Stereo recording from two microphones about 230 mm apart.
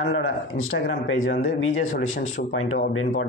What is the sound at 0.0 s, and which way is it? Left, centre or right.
Speech, left.